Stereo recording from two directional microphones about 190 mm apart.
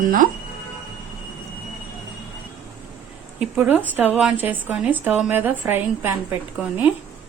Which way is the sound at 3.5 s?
10° right (ahead or behind).